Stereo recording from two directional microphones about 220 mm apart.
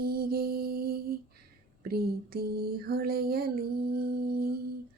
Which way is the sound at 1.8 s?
45° right (ahead or behind).